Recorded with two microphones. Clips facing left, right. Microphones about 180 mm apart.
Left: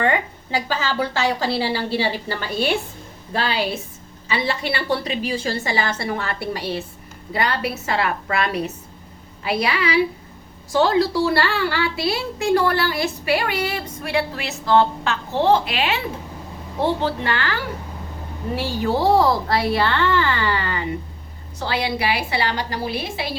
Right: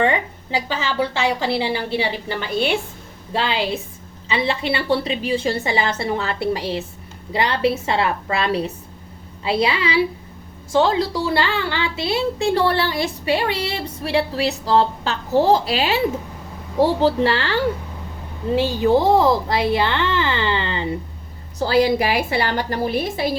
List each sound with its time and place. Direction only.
0.0 s a woman's voice: 25° right (ahead or behind)
18.5 s a woman's voice: 20° right (ahead or behind)
21.6 s a woman's voice: 40° right (ahead or behind)